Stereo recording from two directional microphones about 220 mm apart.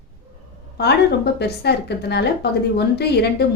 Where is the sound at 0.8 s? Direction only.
50° left (ahead or behind).